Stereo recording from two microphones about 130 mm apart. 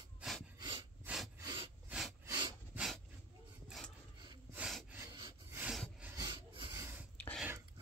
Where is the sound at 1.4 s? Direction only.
35° right (ahead or behind).